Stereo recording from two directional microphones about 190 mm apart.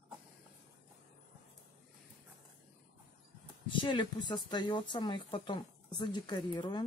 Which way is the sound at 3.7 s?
25° left (ahead or behind).